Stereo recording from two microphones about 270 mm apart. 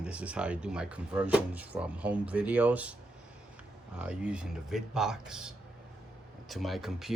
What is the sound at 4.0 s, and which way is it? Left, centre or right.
Speech, centre.